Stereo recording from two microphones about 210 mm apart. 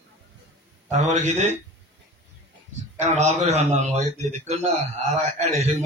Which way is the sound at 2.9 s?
35° right (ahead or behind).